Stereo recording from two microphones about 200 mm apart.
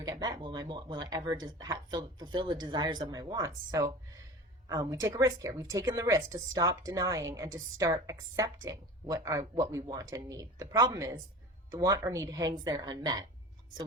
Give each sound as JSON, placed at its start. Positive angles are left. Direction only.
{"t": 0.0, "sound": "a woman's voice", "side_deg": -20}